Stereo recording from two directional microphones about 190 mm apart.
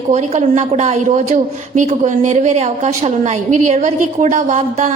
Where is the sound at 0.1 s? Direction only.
40° right (ahead or behind).